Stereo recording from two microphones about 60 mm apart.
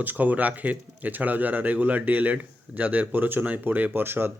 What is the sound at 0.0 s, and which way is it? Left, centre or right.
Speech, right.